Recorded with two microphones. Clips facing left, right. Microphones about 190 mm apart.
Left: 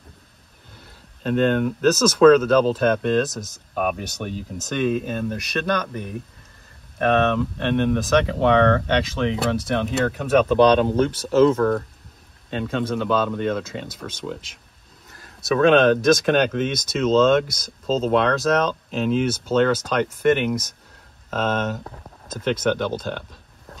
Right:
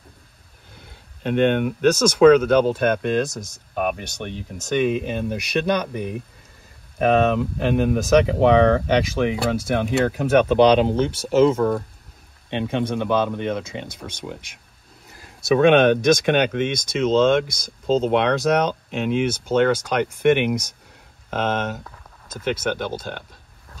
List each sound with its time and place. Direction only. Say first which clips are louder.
1.2 s speech: right 1 dB; 15° right (ahead or behind)
3.3 s speech: even; centre (ahead or behind)
4.6 s speech: right 2 dB; 10° right (ahead or behind)
9.4 s speech: right 1 dB; centre (ahead or behind)
15.1 s a sound: right 3 dB; 10° right (ahead or behind)
16.0 s speech: even; centre (ahead or behind)
16.4 s speech: right 1 dB; 10° right (ahead or behind)
21.8 s a sound: left 5 dB; 30° left (ahead or behind)
22.4 s speech: left 2 dB; 10° right (ahead or behind)